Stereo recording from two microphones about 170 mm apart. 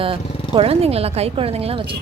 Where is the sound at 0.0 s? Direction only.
30° right (ahead or behind).